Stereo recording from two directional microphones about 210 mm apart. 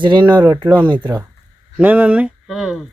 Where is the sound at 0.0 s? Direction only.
20° right (ahead or behind).